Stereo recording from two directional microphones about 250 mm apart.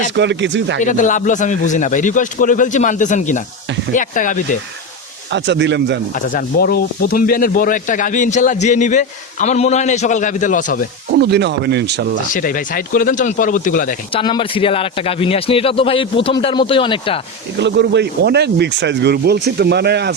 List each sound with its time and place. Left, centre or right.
0.1 s speech: right
0.8 s a man's voice: left
5.3 s speech: right
6.1 s speech: left
11.2 s speech: right
12.3 s speech: left
14.1 s a man's voice: left
17.6 s speech: right